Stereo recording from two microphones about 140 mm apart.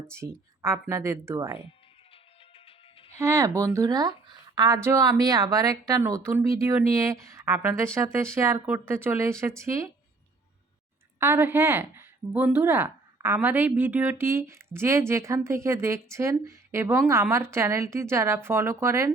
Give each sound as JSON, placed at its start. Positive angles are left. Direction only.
{"t": 0.1, "sound": "a woman's voice", "side_deg": -20}
{"t": 3.1, "sound": "a woman's voice", "side_deg": -20}
{"t": 11.2, "sound": "a woman's voice", "side_deg": -15}